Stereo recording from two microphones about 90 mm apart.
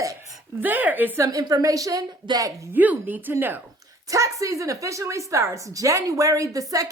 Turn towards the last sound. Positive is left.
turn(degrees=-40)  # may be behind; listen again after turning